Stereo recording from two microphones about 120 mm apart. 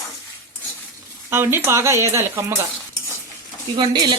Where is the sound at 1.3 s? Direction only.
20° right (ahead or behind).